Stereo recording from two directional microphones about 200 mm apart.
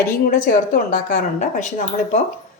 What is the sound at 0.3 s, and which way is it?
A woman's voice, 40° left (ahead or behind).